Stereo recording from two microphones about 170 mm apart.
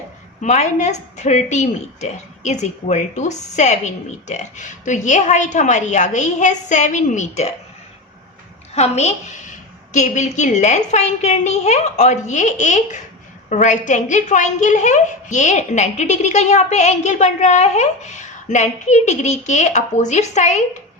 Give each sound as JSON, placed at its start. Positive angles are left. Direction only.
{"t": 0.4, "sound": "a woman's voice", "side_deg": 45}
{"t": 8.7, "sound": "a woman's voice", "side_deg": 40}